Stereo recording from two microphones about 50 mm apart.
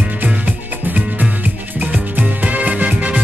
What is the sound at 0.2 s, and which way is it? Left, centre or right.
Music, right.